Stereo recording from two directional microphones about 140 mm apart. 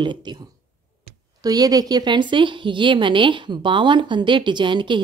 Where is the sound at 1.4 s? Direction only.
25° right (ahead or behind).